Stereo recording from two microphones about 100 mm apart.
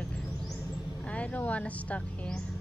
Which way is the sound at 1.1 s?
15° left (ahead or behind).